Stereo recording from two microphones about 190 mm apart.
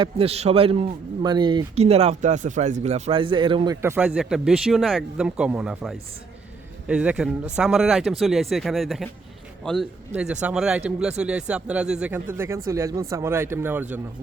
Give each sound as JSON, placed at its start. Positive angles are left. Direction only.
{"t": 0.0, "sound": "a man's voice", "side_deg": -30}
{"t": 3.8, "sound": "speech", "side_deg": -10}